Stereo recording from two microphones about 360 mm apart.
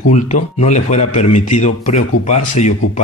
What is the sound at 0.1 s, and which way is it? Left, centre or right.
Speech, centre.